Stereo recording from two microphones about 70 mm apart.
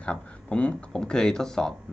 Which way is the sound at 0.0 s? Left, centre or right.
Centre.